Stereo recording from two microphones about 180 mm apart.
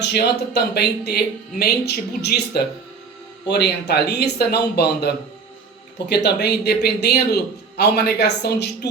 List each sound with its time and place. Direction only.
0.0 s speech: 65° left (ahead or behind)